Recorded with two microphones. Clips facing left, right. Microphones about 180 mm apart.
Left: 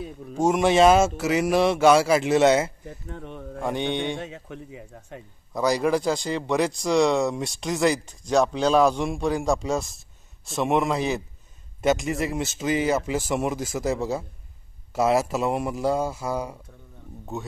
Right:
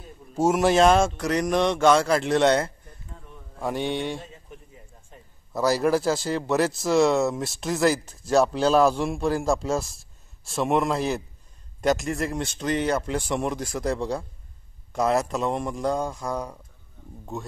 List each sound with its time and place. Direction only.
0.0 s speech: 90° left
0.4 s speech: 5° right (ahead or behind)
2.8 s a sound: 80° left
3.6 s speech: centre (ahead or behind)
4.2 s speech: 80° left
5.5 s speech: 5° right (ahead or behind)